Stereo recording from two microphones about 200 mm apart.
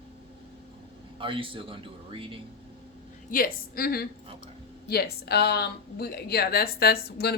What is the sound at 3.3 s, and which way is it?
A woman's voice, 45° left (ahead or behind).